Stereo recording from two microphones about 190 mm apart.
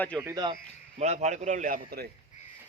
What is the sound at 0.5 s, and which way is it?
Speech, 35° right (ahead or behind).